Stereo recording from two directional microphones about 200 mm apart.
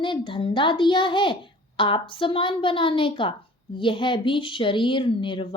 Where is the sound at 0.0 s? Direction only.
25° left (ahead or behind).